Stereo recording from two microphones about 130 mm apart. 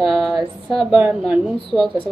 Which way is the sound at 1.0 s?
10° right (ahead or behind).